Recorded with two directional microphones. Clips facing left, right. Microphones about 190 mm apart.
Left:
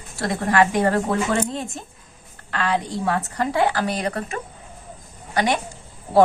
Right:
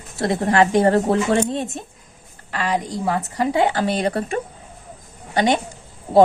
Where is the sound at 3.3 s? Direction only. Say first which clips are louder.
Right 3 dB; 20° right (ahead or behind).